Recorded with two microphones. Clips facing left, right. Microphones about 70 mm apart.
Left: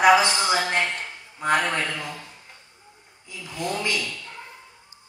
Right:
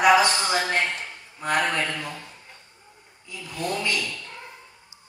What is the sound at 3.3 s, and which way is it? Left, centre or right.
Snoring, left.